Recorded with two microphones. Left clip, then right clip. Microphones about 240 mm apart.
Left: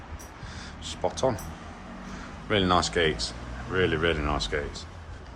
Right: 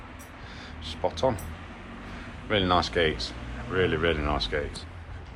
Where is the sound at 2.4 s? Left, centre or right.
Centre.